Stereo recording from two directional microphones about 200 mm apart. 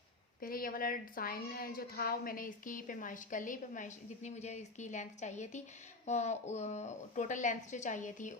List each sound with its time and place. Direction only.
0.4 s a woman's voice: 45° left (ahead or behind)